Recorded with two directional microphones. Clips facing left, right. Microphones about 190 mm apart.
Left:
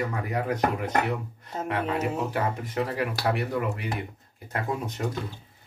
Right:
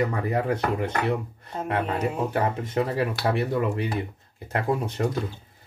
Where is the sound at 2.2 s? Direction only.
25° right (ahead or behind).